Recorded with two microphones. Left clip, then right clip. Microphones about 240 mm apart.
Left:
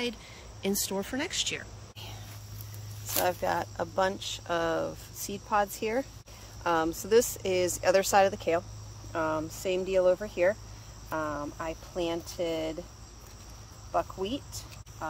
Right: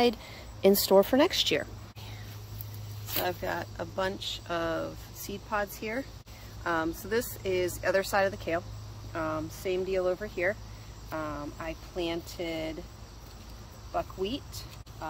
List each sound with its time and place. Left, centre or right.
0.6 s speech: centre
3.2 s speech: left
13.9 s speech: centre